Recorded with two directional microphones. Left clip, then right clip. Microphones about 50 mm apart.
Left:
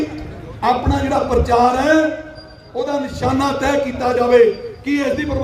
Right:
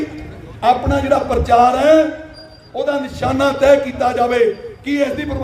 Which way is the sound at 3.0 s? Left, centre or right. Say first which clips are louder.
Even; right.